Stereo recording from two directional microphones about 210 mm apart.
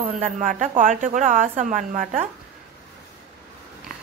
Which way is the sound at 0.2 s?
35° right (ahead or behind).